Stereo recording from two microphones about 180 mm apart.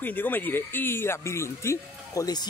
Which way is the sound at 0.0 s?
10° left (ahead or behind).